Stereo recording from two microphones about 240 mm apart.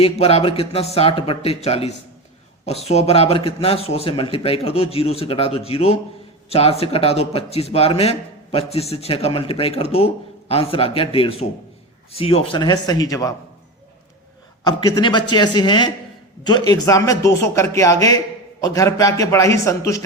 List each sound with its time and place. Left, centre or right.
0.0 s a man's voice: left
14.6 s a man's voice: centre